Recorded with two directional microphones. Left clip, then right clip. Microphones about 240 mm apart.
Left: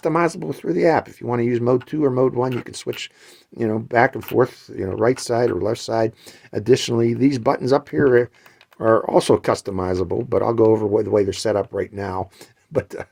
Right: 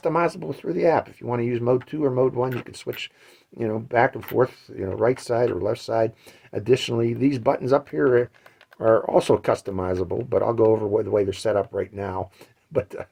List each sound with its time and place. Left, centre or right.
0.0 s speech: left